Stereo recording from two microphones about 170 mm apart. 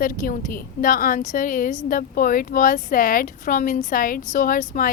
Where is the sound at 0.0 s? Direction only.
55° left (ahead or behind).